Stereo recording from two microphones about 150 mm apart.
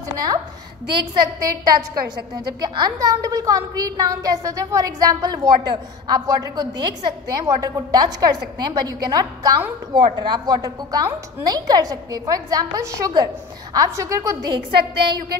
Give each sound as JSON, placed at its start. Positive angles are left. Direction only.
{"t": 0.8, "sound": "a woman's voice", "side_deg": -25}